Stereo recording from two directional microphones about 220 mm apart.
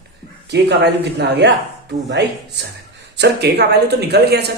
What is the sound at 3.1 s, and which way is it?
Speech, 50° right (ahead or behind).